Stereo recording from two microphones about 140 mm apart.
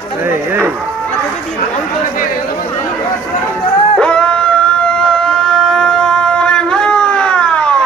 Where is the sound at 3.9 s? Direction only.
10° left (ahead or behind).